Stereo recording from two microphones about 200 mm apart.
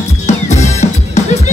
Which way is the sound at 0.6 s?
35° left (ahead or behind).